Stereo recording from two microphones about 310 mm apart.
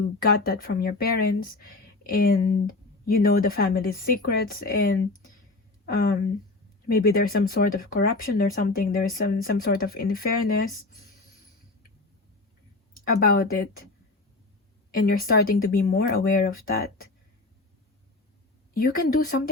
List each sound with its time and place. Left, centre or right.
0.2 s speech: left
13.1 s speech: left
14.9 s speech: left
18.7 s speech: left